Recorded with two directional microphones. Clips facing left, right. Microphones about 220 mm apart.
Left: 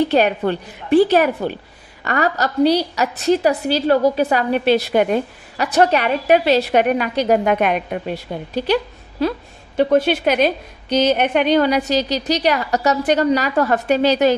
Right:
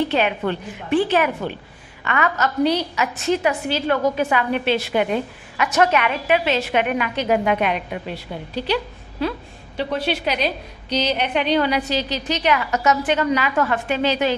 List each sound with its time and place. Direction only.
0.1 s a woman's voice: 40° left (ahead or behind)